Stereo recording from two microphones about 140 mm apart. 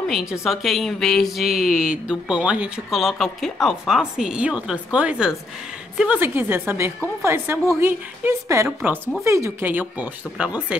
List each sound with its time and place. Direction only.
0.1 s a woman's voice: 5° right (ahead or behind)